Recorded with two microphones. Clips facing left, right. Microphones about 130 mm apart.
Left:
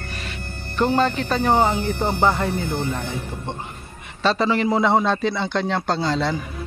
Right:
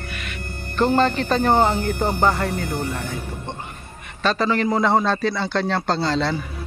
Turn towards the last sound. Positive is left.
turn(degrees=15)  # may be behind; listen again after turning